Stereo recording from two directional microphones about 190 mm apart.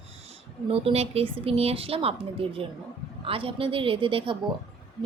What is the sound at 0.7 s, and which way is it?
A woman's voice, 30° right (ahead or behind).